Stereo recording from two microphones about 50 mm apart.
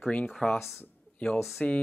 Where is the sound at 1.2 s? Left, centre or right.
Left.